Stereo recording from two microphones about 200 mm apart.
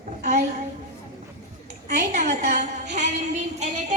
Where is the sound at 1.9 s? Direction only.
35° right (ahead or behind).